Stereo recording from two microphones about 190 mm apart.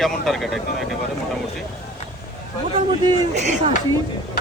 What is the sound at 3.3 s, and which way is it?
Speech, 35° right (ahead or behind).